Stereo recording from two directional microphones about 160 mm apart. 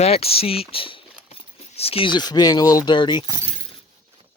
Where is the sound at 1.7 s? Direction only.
35° left (ahead or behind).